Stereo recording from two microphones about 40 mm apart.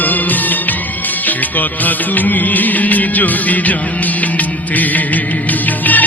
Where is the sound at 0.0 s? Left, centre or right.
Left.